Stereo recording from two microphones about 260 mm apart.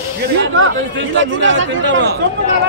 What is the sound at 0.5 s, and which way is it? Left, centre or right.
Speech, right.